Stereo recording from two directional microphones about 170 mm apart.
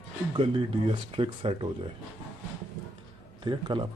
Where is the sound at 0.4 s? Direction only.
30° right (ahead or behind).